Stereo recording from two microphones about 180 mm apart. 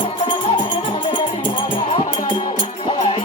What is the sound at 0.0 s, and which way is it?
Music, 30° left (ahead or behind).